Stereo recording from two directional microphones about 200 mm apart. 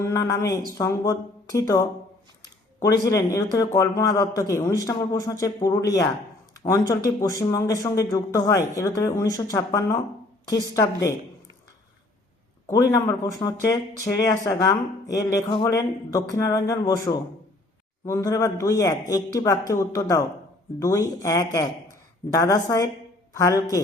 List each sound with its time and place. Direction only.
0.0 s speech: 15° left (ahead or behind)
3.0 s speech: 15° left (ahead or behind)
12.6 s speech: 15° left (ahead or behind)